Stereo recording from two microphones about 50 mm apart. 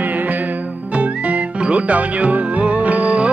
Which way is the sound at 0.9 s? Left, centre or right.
Right.